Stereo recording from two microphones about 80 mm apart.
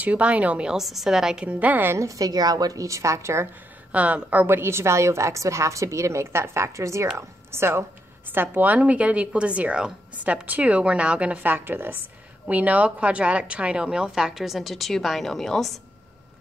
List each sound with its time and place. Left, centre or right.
0.0 s a woman's voice: centre
2.0 s a woman's voice: right
3.9 s a woman's voice: centre; by 7.8 s right
8.3 s a woman's voice: right; by 15.7 s centre